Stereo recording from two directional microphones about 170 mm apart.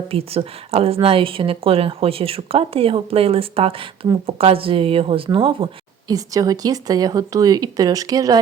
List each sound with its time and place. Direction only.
0.1 s a woman's voice: 35° right (ahead or behind)